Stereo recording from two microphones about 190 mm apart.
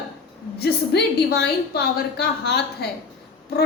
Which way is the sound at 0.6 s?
60° left (ahead or behind).